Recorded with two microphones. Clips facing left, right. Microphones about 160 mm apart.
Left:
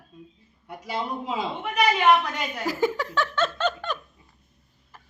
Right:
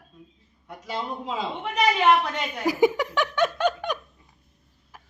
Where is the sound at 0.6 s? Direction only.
10° left (ahead or behind).